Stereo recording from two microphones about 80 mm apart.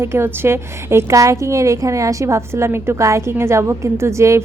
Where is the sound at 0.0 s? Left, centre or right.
Right.